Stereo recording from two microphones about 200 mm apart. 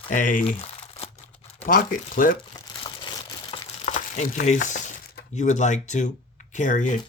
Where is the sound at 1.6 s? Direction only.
45° left (ahead or behind).